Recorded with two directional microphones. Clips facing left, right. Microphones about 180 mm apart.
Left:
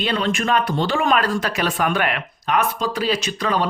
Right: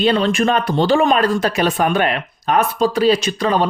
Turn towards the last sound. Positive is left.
turn(degrees=-30)  # may be behind; listen again after turning